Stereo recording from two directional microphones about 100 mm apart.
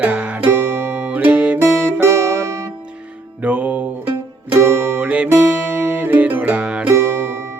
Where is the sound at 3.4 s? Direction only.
15° right (ahead or behind).